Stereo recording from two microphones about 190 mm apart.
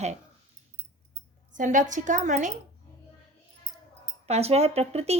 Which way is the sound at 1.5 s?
40° right (ahead or behind).